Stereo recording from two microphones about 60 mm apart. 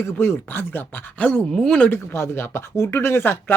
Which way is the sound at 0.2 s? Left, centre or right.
Left.